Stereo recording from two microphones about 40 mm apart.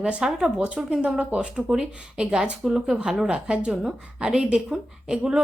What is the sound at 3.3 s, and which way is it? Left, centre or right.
A woman's voice, right.